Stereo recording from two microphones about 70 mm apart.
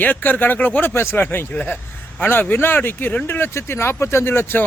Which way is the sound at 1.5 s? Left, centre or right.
Left.